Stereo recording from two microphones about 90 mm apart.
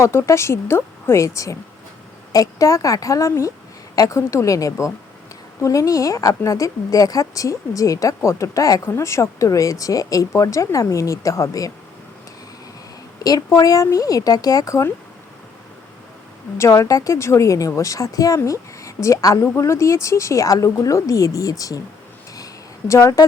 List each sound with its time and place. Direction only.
0.0 s speech: 30° left (ahead or behind)
13.2 s speech: 40° left (ahead or behind)
16.6 s speech: 35° left (ahead or behind)
18.3 s a sound: 35° left (ahead or behind)
19.0 s speech: 35° left (ahead or behind)
22.9 s speech: 35° left (ahead or behind)